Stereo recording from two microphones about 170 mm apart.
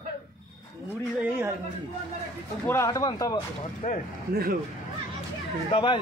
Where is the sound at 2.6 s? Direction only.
15° left (ahead or behind).